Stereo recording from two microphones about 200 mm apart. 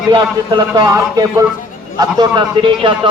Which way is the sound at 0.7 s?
20° right (ahead or behind).